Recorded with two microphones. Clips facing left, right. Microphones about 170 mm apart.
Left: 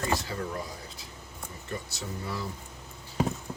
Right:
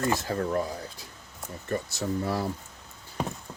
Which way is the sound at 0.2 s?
50° right (ahead or behind).